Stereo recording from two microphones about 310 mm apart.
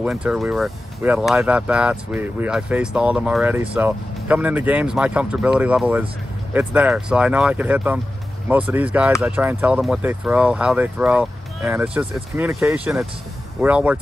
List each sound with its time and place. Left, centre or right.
0.0 s speech: centre